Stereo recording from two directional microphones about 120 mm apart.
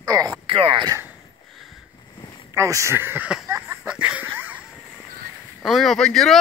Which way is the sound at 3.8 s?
10° right (ahead or behind).